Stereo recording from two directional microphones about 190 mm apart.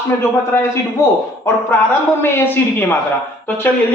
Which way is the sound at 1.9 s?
10° left (ahead or behind).